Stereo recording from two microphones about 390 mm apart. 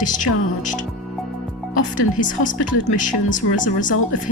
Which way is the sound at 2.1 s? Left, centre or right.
Centre.